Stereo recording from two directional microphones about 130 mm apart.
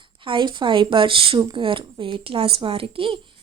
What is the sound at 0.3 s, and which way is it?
A woman's voice, 40° right (ahead or behind).